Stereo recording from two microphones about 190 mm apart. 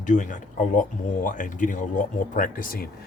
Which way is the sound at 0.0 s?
40° left (ahead or behind).